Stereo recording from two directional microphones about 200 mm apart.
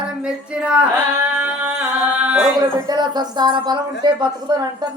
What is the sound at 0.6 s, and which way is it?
Singing, 5° right (ahead or behind).